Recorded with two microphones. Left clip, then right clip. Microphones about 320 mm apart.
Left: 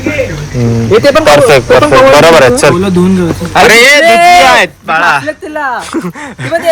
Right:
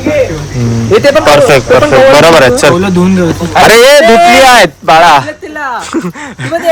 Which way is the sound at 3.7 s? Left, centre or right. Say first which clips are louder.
Right 1 dB; centre.